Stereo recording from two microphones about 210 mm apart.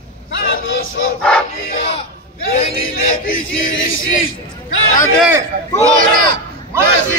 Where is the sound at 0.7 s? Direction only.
65° left (ahead or behind).